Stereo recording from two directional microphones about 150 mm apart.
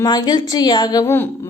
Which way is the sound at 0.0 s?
25° left (ahead or behind).